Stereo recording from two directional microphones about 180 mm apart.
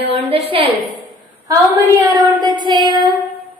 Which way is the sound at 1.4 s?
20° right (ahead or behind).